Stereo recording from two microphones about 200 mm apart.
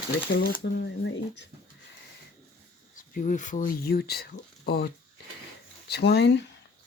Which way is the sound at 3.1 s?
40° left (ahead or behind).